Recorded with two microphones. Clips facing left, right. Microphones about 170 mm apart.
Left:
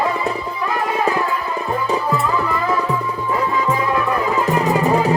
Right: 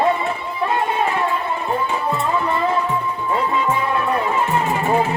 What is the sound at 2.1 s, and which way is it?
Music, 30° right (ahead or behind).